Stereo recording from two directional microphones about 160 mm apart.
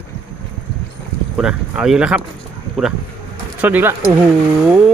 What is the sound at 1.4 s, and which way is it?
Speech, 5° right (ahead or behind).